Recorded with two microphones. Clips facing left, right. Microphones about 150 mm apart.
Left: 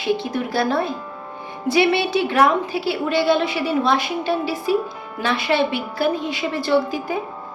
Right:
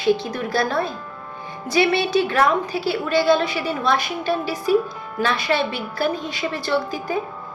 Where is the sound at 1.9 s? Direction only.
20° left (ahead or behind).